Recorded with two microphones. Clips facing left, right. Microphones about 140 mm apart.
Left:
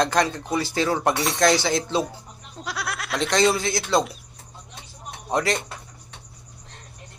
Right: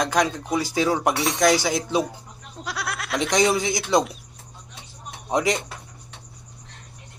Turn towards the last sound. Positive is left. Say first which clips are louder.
# right 1 dB
turn(degrees=-15)  # may be behind; listen again after turning